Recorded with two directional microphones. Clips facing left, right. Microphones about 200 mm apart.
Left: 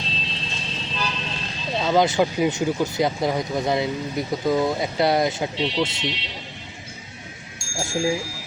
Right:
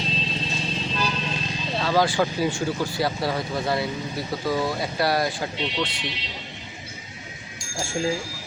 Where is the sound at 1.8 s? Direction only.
20° left (ahead or behind).